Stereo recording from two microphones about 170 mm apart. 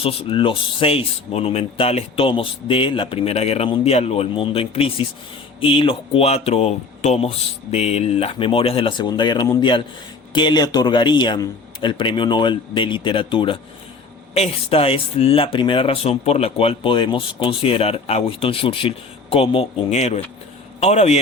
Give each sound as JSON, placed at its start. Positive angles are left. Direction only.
{"t": 0.0, "sound": "a man's voice", "side_deg": 35}